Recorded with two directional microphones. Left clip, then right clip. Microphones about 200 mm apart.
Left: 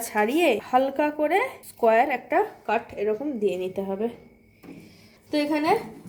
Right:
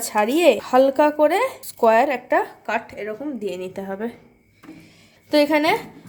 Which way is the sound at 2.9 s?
20° right (ahead or behind).